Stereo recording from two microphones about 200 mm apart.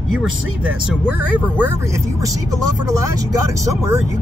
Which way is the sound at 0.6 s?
5° right (ahead or behind).